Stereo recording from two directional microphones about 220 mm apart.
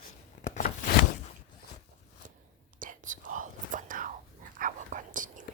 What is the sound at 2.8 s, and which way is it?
Whispering, 35° right (ahead or behind).